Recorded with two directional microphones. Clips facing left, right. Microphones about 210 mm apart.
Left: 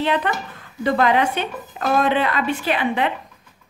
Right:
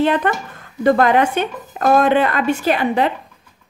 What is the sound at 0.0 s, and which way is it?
Speech, 50° right (ahead or behind).